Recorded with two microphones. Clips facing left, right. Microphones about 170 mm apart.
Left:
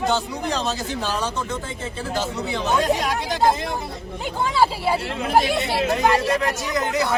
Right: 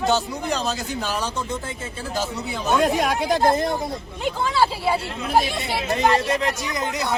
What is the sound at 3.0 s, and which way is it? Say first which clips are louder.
Speech: right 2 dB; 55° right (ahead or behind).